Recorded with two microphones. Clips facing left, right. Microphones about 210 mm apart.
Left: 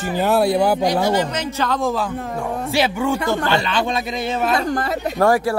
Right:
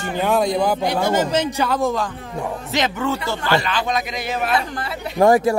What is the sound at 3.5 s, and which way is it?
Speech, 25° left (ahead or behind).